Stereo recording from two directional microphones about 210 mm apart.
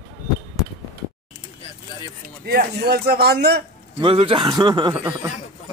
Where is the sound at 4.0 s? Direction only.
25° right (ahead or behind).